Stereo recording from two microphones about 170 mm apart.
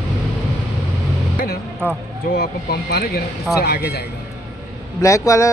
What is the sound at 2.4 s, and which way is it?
Speech, 70° left (ahead or behind).